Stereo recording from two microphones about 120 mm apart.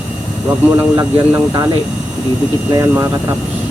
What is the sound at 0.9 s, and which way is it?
Speech, 25° right (ahead or behind).